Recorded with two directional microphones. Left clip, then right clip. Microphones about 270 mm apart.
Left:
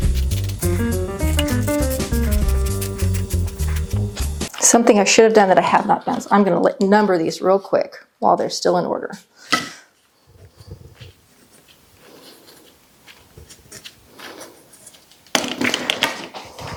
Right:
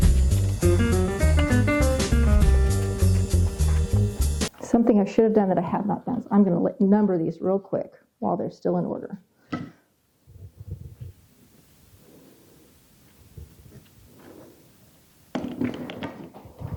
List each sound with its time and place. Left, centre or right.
0.2 s music: centre
6.9 s speech: centre
8.2 s speech: centre
8.4 s speech: centre
8.8 s speech: centre
9.1 s a sound: centre
13.8 s a sound: centre